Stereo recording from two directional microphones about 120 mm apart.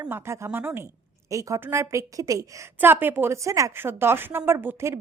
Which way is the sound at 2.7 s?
15° right (ahead or behind).